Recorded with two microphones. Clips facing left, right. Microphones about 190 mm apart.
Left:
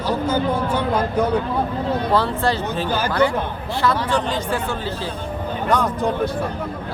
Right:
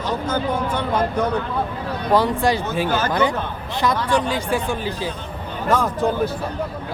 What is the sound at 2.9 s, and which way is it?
Speech, 10° left (ahead or behind).